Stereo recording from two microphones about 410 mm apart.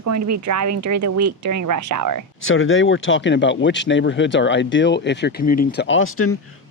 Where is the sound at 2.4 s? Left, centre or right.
Left.